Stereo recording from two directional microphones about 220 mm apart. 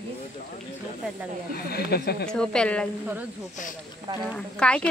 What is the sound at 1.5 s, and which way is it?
Speech, 45° left (ahead or behind).